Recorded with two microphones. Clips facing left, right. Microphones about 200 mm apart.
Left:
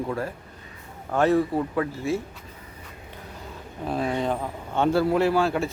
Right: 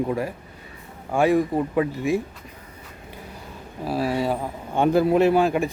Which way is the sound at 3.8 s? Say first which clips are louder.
Right 2 dB; 5° right (ahead or behind).